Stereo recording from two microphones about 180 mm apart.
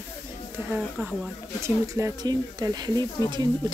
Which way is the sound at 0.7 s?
5° right (ahead or behind).